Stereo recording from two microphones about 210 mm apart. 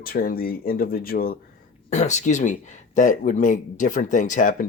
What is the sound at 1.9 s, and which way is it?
Speech, 35° left (ahead or behind).